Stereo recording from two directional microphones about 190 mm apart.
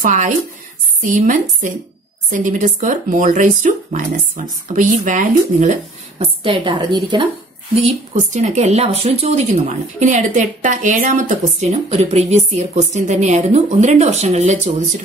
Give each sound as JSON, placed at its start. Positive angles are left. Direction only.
{"t": 0.0, "sound": "a woman's voice", "side_deg": -40}
{"t": 7.7, "sound": "a woman's voice", "side_deg": -35}